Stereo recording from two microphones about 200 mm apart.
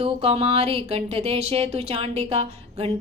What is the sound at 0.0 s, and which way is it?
Speech, 30° right (ahead or behind).